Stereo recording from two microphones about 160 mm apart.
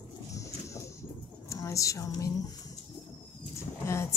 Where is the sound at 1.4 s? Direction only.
20° left (ahead or behind).